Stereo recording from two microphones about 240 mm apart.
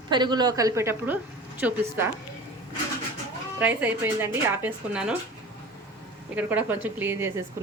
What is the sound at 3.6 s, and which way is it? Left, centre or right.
Speech, centre.